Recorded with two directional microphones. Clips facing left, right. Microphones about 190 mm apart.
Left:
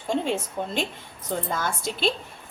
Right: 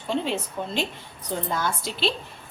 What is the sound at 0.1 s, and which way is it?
A woman's voice, 50° left (ahead or behind).